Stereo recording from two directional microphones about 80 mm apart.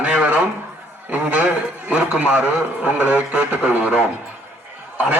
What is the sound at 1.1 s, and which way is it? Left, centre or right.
A man's voice, centre.